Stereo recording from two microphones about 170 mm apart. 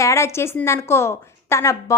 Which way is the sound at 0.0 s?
15° left (ahead or behind).